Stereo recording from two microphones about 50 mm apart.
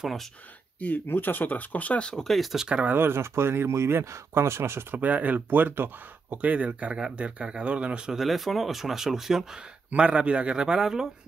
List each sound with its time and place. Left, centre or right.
0.0 s speech: centre
0.7 s speech: left
2.2 s speech: centre
3.0 s speech: right
4.3 s speech: right
4.9 s a man's voice: right
8.1 s speech: centre
9.8 s a man's voice: right